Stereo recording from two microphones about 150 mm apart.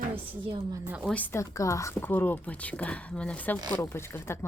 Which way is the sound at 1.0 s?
10° left (ahead or behind).